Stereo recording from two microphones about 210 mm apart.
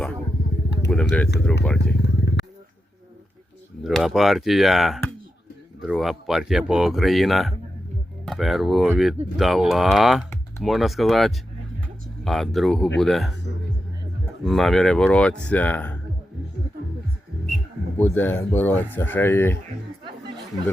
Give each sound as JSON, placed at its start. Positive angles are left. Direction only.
{"t": 0.9, "sound": "speech", "side_deg": 5}
{"t": 1.8, "sound": "vehicle", "side_deg": 55}
{"t": 3.8, "sound": "speech", "side_deg": 0}
{"t": 14.4, "sound": "speech", "side_deg": 0}
{"t": 18.0, "sound": "speech", "side_deg": 10}